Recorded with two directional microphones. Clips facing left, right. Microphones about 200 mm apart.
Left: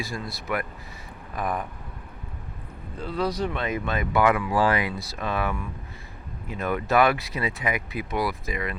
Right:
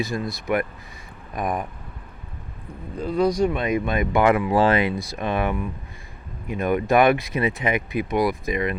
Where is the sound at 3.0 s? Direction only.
15° right (ahead or behind).